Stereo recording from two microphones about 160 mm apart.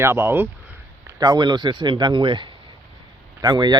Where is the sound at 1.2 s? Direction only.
25° right (ahead or behind).